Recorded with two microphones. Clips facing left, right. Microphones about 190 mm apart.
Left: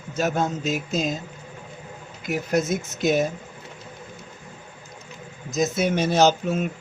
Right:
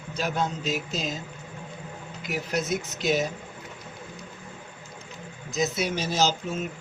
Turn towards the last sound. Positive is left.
turn(degrees=60)  # may be behind; listen again after turning